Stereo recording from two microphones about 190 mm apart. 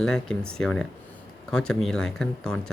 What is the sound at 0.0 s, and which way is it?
Speech, 5° left (ahead or behind).